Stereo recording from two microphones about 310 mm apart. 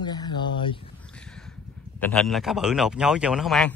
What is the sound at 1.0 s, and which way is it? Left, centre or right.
Speech, centre.